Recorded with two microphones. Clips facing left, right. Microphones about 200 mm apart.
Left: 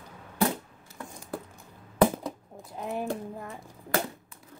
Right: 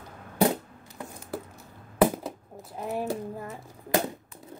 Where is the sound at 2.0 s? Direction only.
5° right (ahead or behind).